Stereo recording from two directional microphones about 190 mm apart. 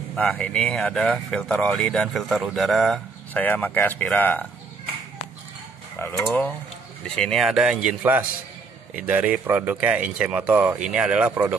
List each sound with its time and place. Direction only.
0.1 s speech: 5° left (ahead or behind)
5.9 s speech: 10° left (ahead or behind); by 11.5 s 10° right (ahead or behind)